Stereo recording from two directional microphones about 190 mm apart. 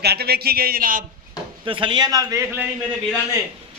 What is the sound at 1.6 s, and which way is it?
A man's voice, 25° right (ahead or behind).